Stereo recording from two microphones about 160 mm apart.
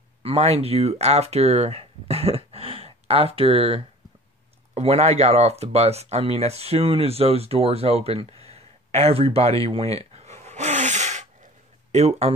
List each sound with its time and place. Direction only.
0.2 s speech: 40° right (ahead or behind)
10.1 s sneeze: 45° right (ahead or behind)
11.9 s speech: 45° right (ahead or behind)